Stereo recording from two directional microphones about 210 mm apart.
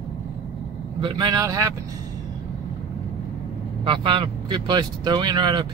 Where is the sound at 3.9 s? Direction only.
25° right (ahead or behind).